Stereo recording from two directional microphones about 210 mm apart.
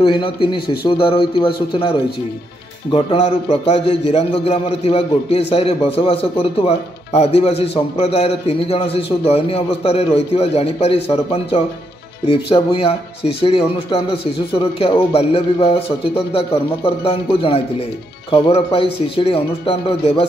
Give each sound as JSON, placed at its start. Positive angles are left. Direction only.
{"t": 0.0, "sound": "speech", "side_deg": 25}
{"t": 12.3, "sound": "speech", "side_deg": 25}